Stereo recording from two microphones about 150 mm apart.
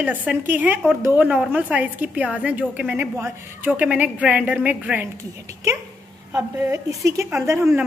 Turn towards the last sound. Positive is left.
turn(degrees=-15)  # may be behind; listen again after turning